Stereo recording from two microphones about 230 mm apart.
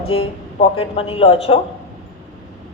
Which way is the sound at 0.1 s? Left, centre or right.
Left.